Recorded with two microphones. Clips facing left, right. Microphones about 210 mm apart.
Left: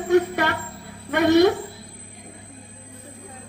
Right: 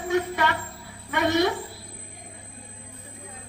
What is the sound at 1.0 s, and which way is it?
Speech, 55° left (ahead or behind).